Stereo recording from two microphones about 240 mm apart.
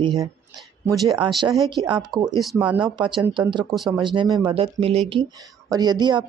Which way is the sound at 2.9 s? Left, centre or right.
Centre.